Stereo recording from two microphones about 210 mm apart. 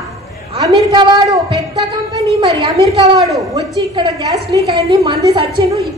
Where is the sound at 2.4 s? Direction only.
20° right (ahead or behind).